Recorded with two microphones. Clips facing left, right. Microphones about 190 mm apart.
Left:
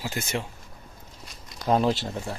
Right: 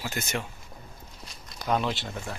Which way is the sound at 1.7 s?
40° left (ahead or behind).